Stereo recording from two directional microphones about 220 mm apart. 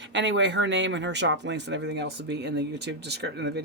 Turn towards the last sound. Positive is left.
turn(degrees=-50)  # may be behind; listen again after turning